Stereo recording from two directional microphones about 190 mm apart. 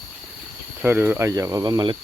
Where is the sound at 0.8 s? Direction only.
10° right (ahead or behind).